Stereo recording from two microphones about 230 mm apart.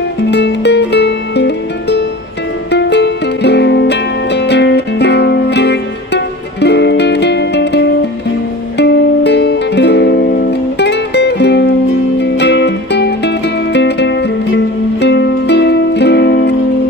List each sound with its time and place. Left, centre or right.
0.3 s music: left